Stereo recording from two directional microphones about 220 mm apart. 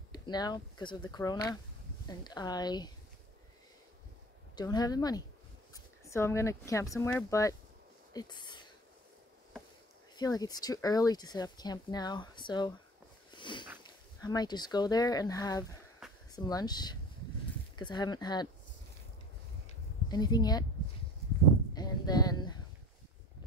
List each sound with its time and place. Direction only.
0.1 s speech: 20° left (ahead or behind)
4.6 s speech: 15° left (ahead or behind)
10.1 s speech: 15° left (ahead or behind)
13.3 s a sound: 20° left (ahead or behind)
13.8 s speech: 20° left (ahead or behind)
16.0 s a sound: centre (ahead or behind)
16.3 s speech: 15° left (ahead or behind)
20.1 s speech: 20° left (ahead or behind)
21.7 s a sound: 20° left (ahead or behind)